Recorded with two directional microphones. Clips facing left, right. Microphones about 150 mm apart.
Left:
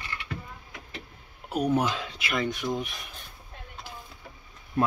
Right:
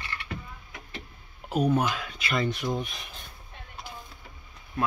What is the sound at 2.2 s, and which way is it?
Speech, 10° left (ahead or behind).